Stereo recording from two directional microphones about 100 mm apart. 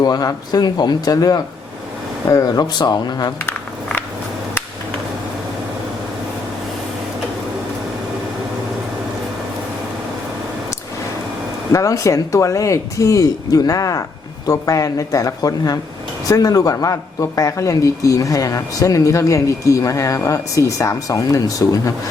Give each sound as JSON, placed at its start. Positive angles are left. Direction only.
{"t": 0.0, "sound": "a man's voice", "side_deg": 40}
{"t": 11.7, "sound": "a man's voice", "side_deg": 35}